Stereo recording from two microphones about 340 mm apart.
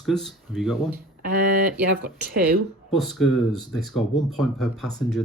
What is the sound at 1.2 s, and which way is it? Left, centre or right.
Speech, right.